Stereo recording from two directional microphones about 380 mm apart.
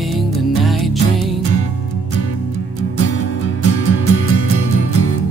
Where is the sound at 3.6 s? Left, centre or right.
Left.